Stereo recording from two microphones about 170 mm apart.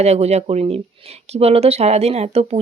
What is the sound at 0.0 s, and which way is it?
Speech, 40° right (ahead or behind).